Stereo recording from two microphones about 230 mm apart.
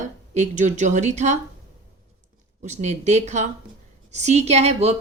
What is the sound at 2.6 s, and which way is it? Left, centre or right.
A woman's voice, right.